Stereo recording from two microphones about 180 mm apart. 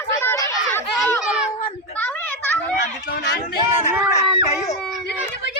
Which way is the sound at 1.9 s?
10° left (ahead or behind).